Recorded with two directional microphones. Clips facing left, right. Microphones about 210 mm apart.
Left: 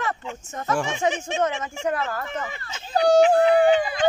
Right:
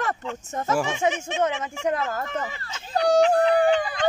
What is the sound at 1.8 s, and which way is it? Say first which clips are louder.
Speech: right 1 dB; 20° right (ahead or behind).